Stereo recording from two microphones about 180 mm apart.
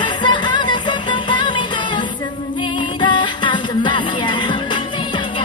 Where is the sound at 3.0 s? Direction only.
25° left (ahead or behind).